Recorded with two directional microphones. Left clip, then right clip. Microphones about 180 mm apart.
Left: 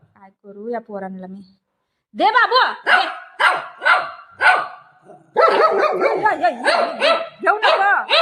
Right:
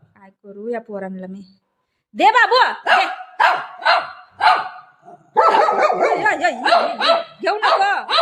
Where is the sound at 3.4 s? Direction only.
10° right (ahead or behind).